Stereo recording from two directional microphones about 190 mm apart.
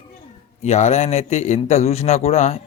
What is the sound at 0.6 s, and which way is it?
A man's voice, 35° left (ahead or behind).